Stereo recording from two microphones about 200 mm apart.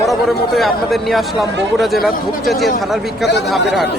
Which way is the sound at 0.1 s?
Centre (ahead or behind).